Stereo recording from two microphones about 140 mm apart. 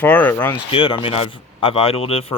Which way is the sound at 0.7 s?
40° left (ahead or behind).